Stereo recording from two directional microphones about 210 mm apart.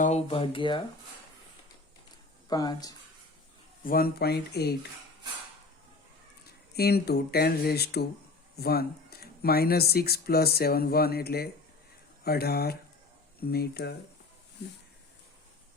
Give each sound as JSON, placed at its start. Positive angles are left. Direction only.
{"t": 0.0, "sound": "speech", "side_deg": 30}
{"t": 2.5, "sound": "speech", "side_deg": 20}
{"t": 3.8, "sound": "speech", "side_deg": 45}
{"t": 6.7, "sound": "speech", "side_deg": 50}